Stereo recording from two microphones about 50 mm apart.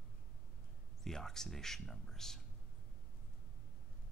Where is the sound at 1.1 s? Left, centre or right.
Centre.